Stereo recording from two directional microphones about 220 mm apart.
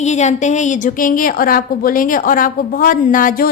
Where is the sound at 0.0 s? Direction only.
30° left (ahead or behind).